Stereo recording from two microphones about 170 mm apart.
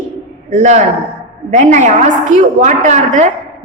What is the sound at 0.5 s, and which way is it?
A woman's voice, 45° right (ahead or behind).